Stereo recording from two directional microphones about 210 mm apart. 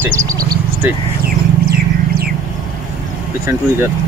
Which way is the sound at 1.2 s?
45° right (ahead or behind).